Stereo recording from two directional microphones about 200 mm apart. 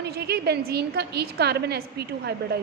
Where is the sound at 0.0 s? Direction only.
55° right (ahead or behind).